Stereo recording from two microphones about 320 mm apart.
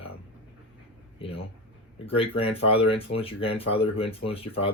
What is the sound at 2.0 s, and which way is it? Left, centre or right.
Speech, centre.